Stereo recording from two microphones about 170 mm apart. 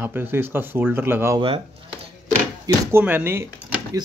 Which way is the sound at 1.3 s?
35° right (ahead or behind).